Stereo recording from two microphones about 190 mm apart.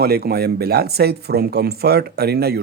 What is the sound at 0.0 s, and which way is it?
Speech, 55° right (ahead or behind).